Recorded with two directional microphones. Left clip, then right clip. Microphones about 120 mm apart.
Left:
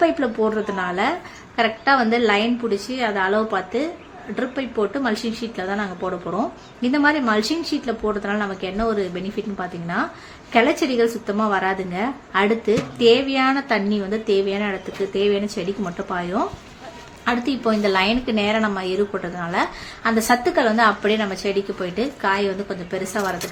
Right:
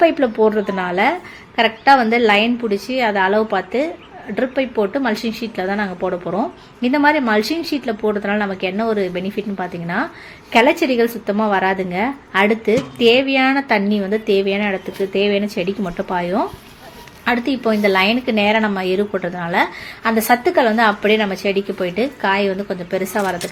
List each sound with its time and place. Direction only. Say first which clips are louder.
0.0 s a woman's voice: right 5 dB; 30° right (ahead or behind)